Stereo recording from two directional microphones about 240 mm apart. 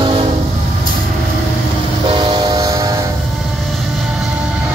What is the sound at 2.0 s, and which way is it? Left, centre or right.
Train, centre.